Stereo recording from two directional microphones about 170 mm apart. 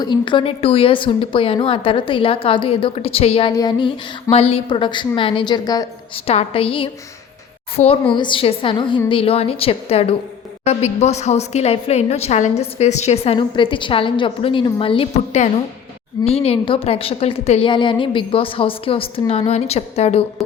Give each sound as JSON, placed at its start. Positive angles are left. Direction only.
{"t": 0.0, "sound": "a woman's voice", "side_deg": 25}
{"t": 3.5, "sound": "a woman's voice", "side_deg": 25}
{"t": 6.2, "sound": "a woman's voice", "side_deg": 35}
{"t": 17.7, "sound": "a woman's voice", "side_deg": 30}